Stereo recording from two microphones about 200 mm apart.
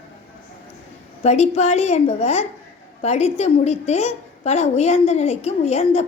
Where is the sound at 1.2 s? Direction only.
35° left (ahead or behind).